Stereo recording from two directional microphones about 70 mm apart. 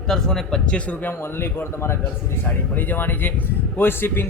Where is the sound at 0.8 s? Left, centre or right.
Centre.